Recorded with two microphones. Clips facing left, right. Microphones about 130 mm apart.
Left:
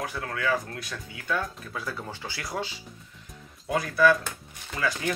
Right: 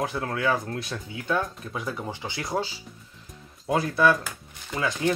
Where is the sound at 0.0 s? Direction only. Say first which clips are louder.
Right 4 dB; 25° right (ahead or behind).